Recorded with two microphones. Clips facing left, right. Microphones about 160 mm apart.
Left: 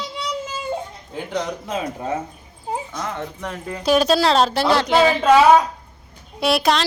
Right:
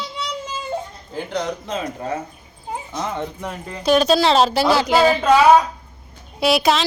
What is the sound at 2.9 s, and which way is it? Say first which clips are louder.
Speech: right 2 dB; 15° right (ahead or behind).